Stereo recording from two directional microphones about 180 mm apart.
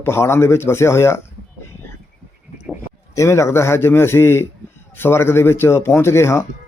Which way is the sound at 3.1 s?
15° left (ahead or behind).